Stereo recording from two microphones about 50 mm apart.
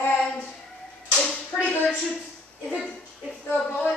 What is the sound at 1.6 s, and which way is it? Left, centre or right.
Speech, left.